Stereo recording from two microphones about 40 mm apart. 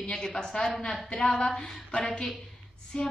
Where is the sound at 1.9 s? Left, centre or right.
Left.